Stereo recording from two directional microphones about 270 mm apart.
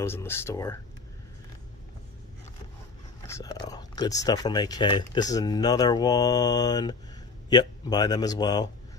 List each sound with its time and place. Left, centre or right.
0.0 s speech: centre
3.3 s speech: centre